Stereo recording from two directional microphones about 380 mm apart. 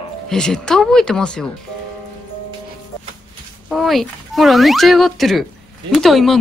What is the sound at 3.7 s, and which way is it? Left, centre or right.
Speech, centre.